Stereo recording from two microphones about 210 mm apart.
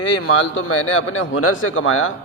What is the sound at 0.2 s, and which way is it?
A man's voice, 85° left.